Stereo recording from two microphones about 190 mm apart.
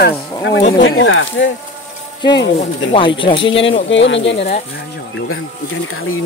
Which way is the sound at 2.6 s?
30° left (ahead or behind).